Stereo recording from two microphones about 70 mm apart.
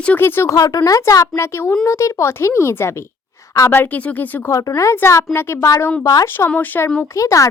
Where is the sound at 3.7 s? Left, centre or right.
Left.